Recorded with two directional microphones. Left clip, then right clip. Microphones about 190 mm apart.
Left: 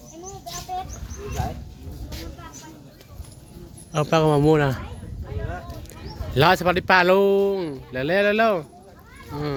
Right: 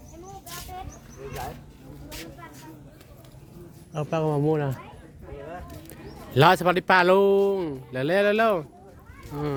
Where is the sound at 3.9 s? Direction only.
15° left (ahead or behind).